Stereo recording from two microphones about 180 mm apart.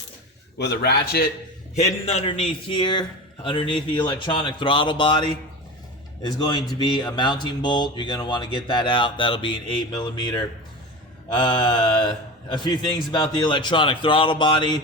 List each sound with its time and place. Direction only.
0.6 s a man's voice: 65° left (ahead or behind)
1.7 s speech: 35° left (ahead or behind)
6.7 s speech: 25° left (ahead or behind)